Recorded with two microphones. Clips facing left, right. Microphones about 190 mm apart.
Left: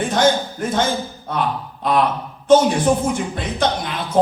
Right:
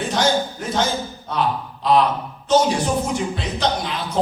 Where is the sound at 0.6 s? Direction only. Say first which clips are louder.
Left 2 dB; 50° left (ahead or behind).